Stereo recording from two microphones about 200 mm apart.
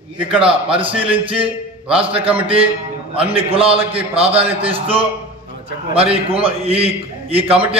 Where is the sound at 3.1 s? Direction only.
30° right (ahead or behind).